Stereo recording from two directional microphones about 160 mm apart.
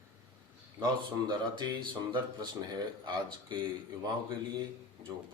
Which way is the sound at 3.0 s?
30° right (ahead or behind).